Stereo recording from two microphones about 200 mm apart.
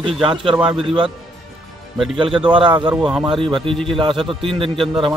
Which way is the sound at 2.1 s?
25° right (ahead or behind).